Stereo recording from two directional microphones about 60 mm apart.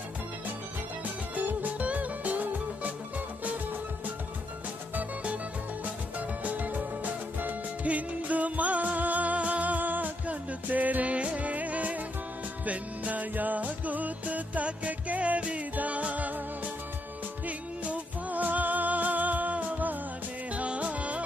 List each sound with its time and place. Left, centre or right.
1.3 s music: right
4.9 s music: right